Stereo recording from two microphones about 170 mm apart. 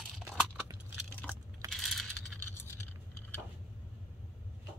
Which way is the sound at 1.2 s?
5° left (ahead or behind).